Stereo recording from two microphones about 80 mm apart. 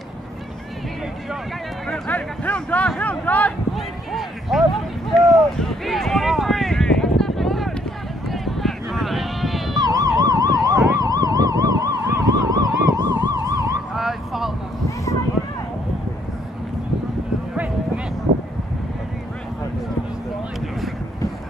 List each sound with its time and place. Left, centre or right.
1.9 s speech: centre
3.7 s a sound: centre
9.8 s emergency vehicle: right
13.9 s vehicle: centre